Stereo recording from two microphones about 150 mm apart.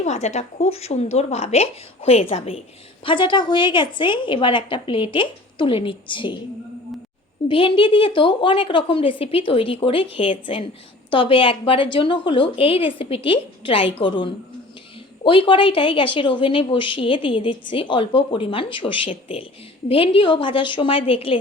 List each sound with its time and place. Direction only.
0.0 s a woman's voice: 50° left (ahead or behind); by 6.3 s 35° left (ahead or behind)
7.4 s a woman's voice: 35° left (ahead or behind)